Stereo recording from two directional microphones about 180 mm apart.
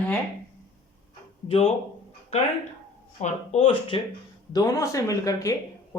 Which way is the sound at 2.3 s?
35° left (ahead or behind).